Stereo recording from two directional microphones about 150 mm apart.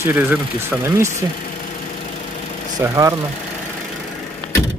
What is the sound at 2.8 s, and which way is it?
Speech, 20° right (ahead or behind).